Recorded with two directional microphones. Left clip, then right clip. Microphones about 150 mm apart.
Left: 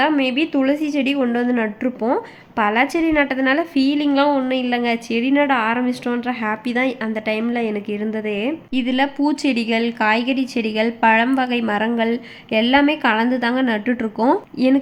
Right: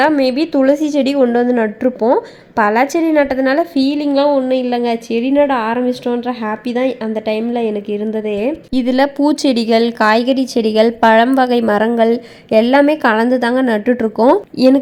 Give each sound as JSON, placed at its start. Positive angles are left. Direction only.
{"t": 0.2, "sound": "a woman's voice", "side_deg": -25}